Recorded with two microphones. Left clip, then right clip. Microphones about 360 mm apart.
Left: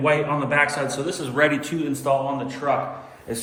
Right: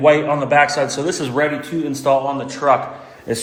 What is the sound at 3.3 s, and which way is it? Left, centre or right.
Speech, right.